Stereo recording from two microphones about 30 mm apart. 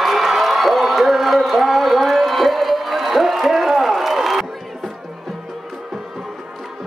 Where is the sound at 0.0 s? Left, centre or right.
Centre.